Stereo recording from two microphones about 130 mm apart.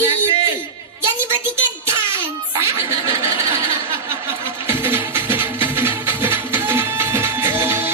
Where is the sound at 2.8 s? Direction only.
25° right (ahead or behind).